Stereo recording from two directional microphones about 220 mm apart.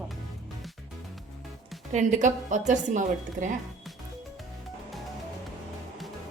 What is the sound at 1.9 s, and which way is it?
A woman's voice, 35° right (ahead or behind).